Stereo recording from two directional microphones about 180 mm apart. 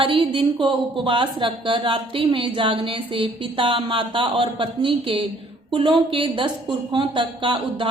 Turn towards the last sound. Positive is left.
turn(degrees=-30)  # may be behind; listen again after turning